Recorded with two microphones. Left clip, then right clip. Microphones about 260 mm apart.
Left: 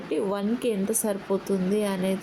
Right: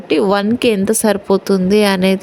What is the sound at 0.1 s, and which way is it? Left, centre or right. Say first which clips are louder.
Speech: right 14 dB; right.